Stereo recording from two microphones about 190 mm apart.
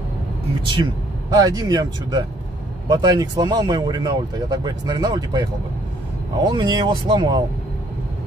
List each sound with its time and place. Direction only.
1.3 s speech: 20° right (ahead or behind)